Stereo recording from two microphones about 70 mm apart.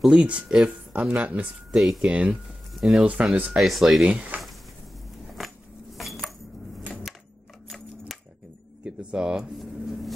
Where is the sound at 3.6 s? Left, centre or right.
Centre.